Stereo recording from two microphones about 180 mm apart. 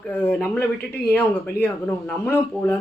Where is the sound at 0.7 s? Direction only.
60° left (ahead or behind).